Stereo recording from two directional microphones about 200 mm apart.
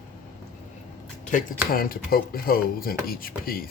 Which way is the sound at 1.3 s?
40° left (ahead or behind).